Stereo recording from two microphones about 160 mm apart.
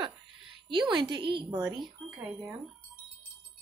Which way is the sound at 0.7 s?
30° right (ahead or behind).